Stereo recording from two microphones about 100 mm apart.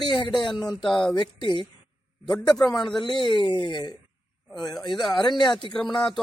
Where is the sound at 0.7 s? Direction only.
5° left (ahead or behind).